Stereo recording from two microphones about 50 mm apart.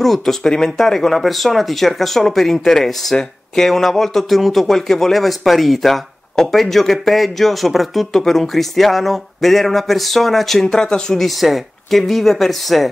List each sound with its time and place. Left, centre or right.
0.0 s speech: centre
11.2 s speech: centre